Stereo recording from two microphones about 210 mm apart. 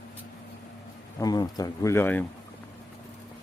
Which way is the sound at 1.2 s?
20° left (ahead or behind).